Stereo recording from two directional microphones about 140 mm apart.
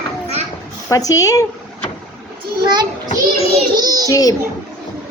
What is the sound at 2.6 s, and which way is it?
Speech, 30° right (ahead or behind).